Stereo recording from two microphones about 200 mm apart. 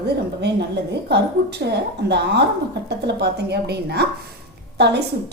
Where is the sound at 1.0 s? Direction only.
55° right (ahead or behind).